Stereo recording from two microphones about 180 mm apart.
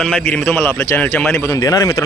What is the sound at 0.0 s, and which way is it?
Speech, 5° left (ahead or behind).